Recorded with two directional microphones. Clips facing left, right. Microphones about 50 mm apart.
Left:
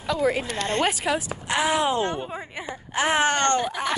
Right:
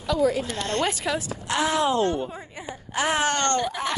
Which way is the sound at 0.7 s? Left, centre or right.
Left.